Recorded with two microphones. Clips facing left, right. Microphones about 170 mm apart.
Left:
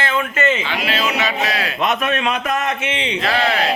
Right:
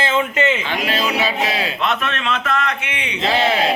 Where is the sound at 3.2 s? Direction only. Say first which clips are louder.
Right 3 dB; 25° right (ahead or behind).